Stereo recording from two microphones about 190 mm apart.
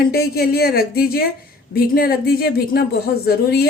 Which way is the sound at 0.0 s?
55° left (ahead or behind).